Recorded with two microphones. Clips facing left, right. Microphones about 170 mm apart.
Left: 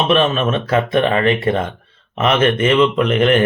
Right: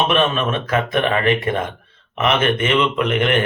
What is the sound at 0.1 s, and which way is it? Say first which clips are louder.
Speech: left 3 dB; 25° left (ahead or behind).